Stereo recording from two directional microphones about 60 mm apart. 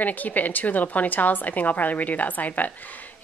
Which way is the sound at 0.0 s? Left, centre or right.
Left.